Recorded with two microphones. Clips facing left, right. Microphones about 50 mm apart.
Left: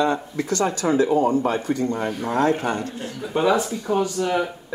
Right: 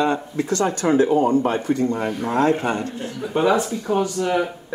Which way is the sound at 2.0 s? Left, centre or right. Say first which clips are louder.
Right 2 dB; centre.